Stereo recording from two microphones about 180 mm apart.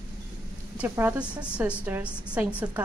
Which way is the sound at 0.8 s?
10° right (ahead or behind).